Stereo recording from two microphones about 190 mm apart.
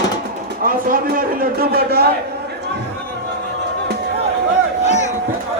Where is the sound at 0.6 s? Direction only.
50° right (ahead or behind).